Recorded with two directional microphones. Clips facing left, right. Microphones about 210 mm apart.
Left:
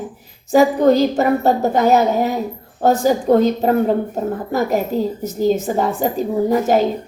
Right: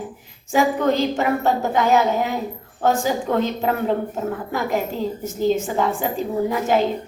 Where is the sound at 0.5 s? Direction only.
40° left (ahead or behind).